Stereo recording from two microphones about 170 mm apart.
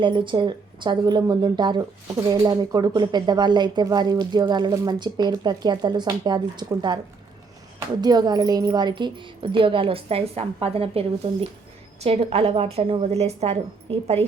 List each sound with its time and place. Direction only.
0.0 s speech: 30° right (ahead or behind)
8.0 s a woman's voice: 25° right (ahead or behind)